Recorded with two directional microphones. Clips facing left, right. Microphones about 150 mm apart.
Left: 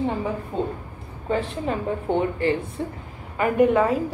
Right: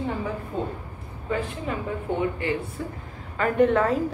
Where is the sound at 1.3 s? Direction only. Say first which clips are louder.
Left 4 dB; 30° left (ahead or behind).